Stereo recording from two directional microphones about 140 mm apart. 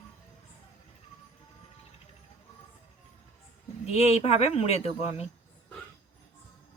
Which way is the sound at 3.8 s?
50° left (ahead or behind).